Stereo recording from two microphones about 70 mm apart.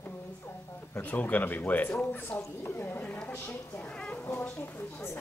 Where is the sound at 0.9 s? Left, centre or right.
Left.